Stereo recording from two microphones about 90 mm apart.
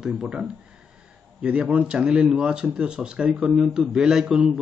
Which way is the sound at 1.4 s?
15° right (ahead or behind).